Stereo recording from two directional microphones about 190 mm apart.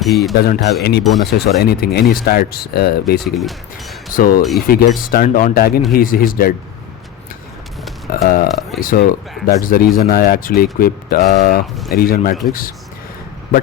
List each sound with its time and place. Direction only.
0.0 s speech: centre (ahead or behind)
0.3 s speech: 55° left (ahead or behind)
3.2 s speech: centre (ahead or behind)
4.1 s speech: 50° left (ahead or behind)
8.1 s speech: 50° left (ahead or behind)